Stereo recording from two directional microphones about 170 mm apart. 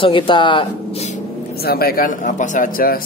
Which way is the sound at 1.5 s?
65° left (ahead or behind).